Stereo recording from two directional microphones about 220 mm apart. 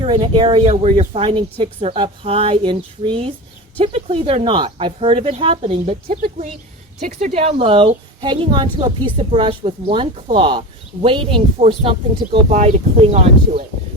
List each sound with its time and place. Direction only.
0.0 s a woman's voice: 25° right (ahead or behind)